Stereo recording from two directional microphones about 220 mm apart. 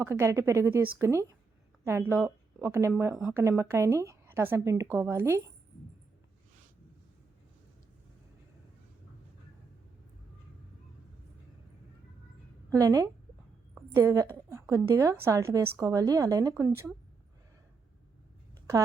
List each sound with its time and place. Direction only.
0.0 s speech: 10° right (ahead or behind)
12.7 s speech: 15° right (ahead or behind)
13.7 s a sound: 10° right (ahead or behind)
14.5 s speech: 15° right (ahead or behind)